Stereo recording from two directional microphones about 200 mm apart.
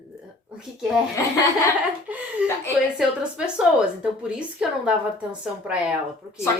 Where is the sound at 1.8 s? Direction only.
5° right (ahead or behind).